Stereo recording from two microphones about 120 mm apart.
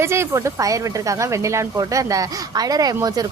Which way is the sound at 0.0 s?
20° right (ahead or behind).